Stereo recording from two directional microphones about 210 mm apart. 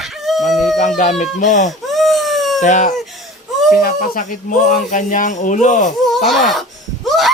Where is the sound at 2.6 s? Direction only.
35° left (ahead or behind).